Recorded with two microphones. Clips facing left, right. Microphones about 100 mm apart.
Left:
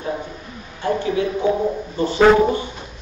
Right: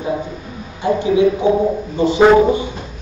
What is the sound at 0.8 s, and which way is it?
A man's voice, 15° right (ahead or behind).